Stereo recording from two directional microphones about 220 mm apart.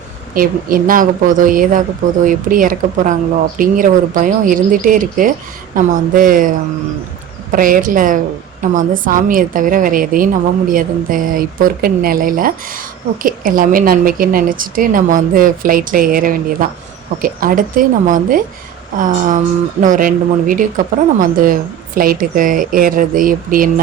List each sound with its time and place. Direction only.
0.3 s a woman's voice: 40° right (ahead or behind)
7.5 s a woman's voice: 40° right (ahead or behind)